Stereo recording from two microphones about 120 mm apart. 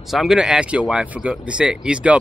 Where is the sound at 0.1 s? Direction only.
Centre (ahead or behind).